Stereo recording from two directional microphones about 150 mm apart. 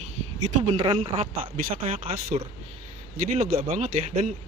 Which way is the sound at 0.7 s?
30° right (ahead or behind).